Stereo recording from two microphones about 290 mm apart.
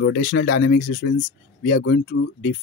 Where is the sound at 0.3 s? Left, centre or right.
Left.